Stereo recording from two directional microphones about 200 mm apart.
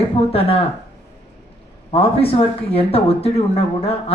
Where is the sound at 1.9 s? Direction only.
30° left (ahead or behind).